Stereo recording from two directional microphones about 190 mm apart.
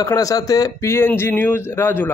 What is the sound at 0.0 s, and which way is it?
Speech, 20° left (ahead or behind).